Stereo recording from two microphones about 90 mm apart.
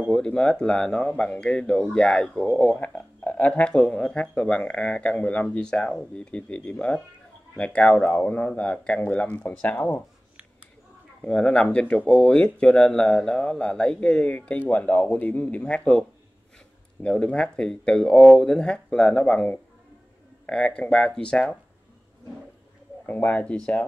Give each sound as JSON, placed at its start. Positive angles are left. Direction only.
{"t": 0.1, "sound": "speech", "side_deg": 10}
{"t": 11.2, "sound": "speech", "side_deg": 10}
{"t": 23.0, "sound": "speech", "side_deg": 15}